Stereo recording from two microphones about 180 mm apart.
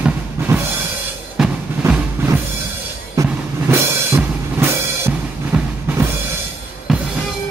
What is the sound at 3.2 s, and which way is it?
Music, 20° right (ahead or behind).